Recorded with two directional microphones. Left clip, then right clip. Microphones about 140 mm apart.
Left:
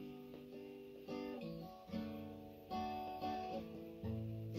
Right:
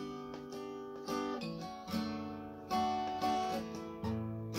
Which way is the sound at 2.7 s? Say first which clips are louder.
Right 10 dB; 15° right (ahead or behind).